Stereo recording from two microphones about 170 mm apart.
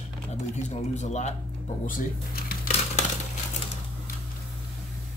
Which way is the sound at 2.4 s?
55° left (ahead or behind).